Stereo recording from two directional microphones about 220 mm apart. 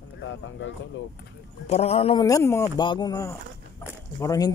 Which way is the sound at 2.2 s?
15° left (ahead or behind).